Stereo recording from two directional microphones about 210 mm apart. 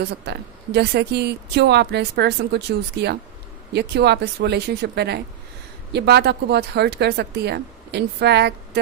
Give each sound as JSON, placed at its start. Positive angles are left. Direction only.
{"t": 0.0, "sound": "a woman's voice", "side_deg": -50}